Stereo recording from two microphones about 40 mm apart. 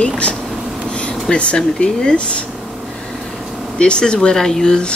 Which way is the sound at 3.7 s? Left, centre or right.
Left.